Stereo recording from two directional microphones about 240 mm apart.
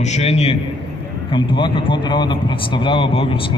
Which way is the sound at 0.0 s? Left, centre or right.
Left.